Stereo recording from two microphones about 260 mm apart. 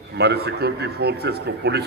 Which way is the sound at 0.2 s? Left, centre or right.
Right.